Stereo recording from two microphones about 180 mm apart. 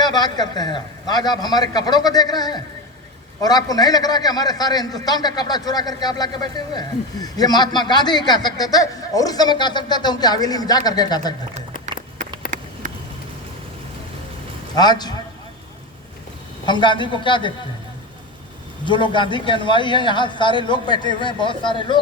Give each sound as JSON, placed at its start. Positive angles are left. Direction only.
{"t": 0.0, "sound": "a man's voice", "side_deg": 20}
{"t": 12.5, "sound": "a sound", "side_deg": -45}
{"t": 14.8, "sound": "a man's voice", "side_deg": 20}
{"t": 16.6, "sound": "a man's voice", "side_deg": 25}
{"t": 18.9, "sound": "a man's voice", "side_deg": 25}